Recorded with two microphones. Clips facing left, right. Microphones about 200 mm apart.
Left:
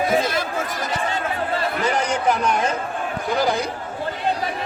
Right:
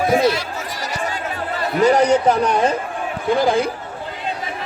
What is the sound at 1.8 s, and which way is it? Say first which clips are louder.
Speech: right 11 dB; 40° right (ahead or behind).